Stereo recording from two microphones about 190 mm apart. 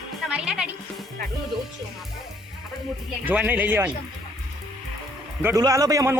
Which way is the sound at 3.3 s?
10° right (ahead or behind).